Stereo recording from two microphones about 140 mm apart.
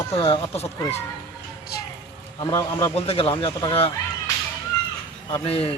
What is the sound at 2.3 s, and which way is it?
Speech, 30° left (ahead or behind).